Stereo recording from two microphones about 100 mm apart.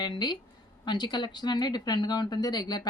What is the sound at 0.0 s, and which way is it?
Speech, 45° left (ahead or behind).